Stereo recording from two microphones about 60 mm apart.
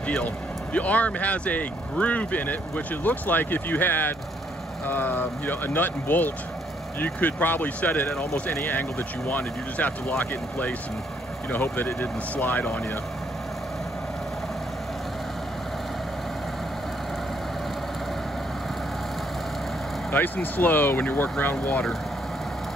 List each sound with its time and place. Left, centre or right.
0.7 s speech: left
11.5 s speech: left
20.1 s speech: left